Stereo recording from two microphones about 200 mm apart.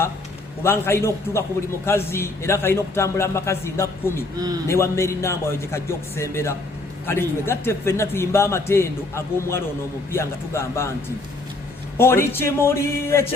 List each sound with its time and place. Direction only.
0.6 s a man's voice: 10° left (ahead or behind)
4.4 s a man's voice: 20° right (ahead or behind)
4.7 s a man's voice: 15° left (ahead or behind)
11.9 s a man's voice: 10° left (ahead or behind)